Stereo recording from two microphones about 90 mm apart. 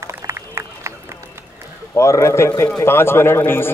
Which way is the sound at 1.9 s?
35° left (ahead or behind).